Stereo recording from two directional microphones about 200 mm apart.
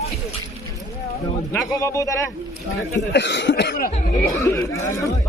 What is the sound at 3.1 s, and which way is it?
Cough, 60° left (ahead or behind).